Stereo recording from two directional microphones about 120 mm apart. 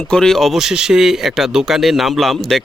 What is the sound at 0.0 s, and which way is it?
Speech, 5° left (ahead or behind).